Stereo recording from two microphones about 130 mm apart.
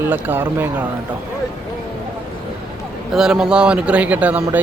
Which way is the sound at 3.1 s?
5° right (ahead or behind).